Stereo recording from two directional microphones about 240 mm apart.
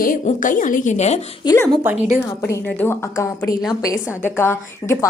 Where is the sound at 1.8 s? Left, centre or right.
Centre.